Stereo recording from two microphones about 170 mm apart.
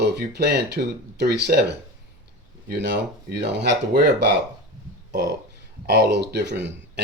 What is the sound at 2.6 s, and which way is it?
Speech, 80° right.